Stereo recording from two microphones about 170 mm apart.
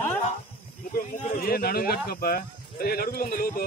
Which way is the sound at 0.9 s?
55° left (ahead or behind).